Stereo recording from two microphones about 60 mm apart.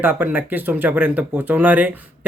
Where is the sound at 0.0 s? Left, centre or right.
Right.